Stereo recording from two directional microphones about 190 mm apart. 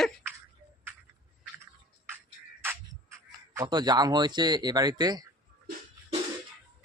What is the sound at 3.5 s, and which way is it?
Speech, 20° right (ahead or behind).